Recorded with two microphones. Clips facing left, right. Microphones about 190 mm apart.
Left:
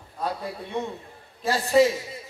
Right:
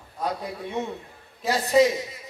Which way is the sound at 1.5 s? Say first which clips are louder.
Even; 20° right (ahead or behind).